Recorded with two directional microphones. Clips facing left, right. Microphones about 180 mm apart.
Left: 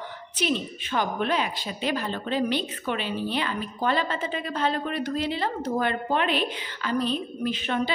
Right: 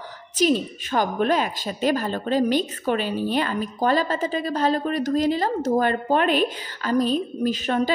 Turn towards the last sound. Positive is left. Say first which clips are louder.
# right 5 dB
turn(degrees=-40)  # may be behind; listen again after turning